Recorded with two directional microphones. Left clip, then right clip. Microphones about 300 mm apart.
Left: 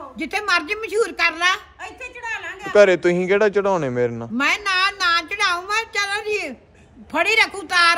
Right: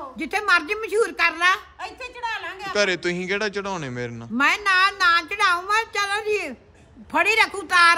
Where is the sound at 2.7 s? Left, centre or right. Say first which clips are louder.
Left 9 dB; centre.